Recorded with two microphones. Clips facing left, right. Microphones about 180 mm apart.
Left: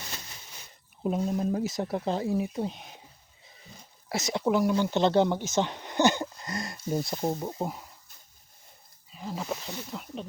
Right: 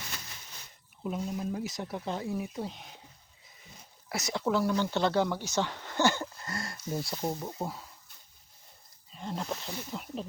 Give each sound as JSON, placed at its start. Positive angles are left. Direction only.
{"t": 1.0, "sound": "speech", "side_deg": 40}
{"t": 4.1, "sound": "speech", "side_deg": 20}
{"t": 9.1, "sound": "speech", "side_deg": 5}